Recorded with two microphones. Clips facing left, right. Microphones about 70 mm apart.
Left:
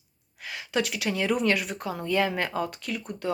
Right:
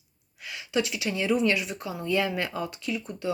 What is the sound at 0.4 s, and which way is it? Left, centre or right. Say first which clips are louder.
Speech: even; left.